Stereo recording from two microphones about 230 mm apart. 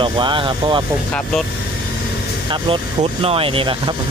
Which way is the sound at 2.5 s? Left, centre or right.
Right.